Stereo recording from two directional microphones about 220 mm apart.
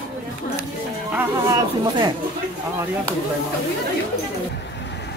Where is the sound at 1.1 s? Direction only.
15° right (ahead or behind).